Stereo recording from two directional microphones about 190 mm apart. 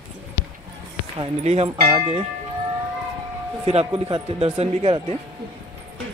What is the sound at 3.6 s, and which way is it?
Speech, 30° right (ahead or behind).